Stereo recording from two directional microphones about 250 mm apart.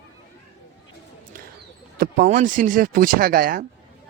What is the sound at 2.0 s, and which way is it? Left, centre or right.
Speech, right.